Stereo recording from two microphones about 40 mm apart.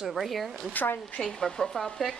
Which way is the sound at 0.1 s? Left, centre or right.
Centre.